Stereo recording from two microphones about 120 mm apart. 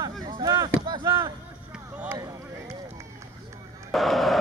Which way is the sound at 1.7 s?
15° right (ahead or behind).